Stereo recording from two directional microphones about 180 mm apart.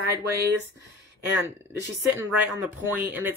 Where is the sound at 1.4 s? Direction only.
15° right (ahead or behind).